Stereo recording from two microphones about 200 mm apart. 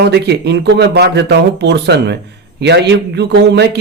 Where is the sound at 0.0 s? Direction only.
55° right (ahead or behind).